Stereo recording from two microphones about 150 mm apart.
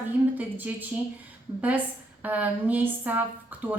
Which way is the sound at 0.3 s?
10° right (ahead or behind).